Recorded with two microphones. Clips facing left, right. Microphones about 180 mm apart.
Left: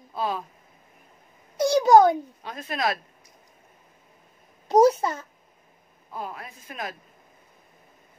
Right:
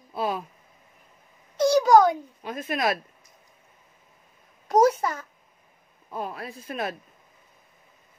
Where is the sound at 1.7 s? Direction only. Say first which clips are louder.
Left 1 dB; 25° left (ahead or behind).